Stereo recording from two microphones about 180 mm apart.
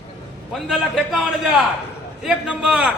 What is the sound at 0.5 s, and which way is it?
A man's voice, centre (ahead or behind).